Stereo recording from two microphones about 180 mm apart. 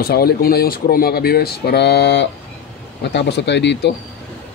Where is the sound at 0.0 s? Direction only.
55° left (ahead or behind); by 3.9 s 75° left (ahead or behind).